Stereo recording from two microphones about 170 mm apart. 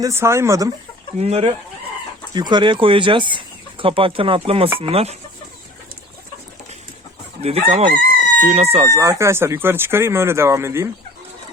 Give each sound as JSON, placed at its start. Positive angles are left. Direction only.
{"t": 0.0, "sound": "speech", "side_deg": -15}
{"t": 1.2, "sound": "speech", "side_deg": -35}
{"t": 2.3, "sound": "speech", "side_deg": -25}
{"t": 7.4, "sound": "speech", "side_deg": -35}
{"t": 8.9, "sound": "speech", "side_deg": -20}